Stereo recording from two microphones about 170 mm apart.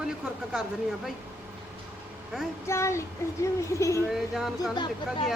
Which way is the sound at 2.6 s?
15° left (ahead or behind).